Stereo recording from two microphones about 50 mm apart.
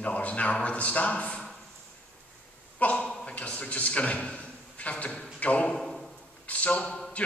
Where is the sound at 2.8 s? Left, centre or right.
Left.